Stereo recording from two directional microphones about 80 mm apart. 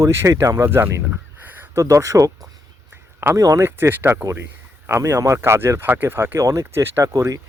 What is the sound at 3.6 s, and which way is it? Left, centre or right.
Speech, right.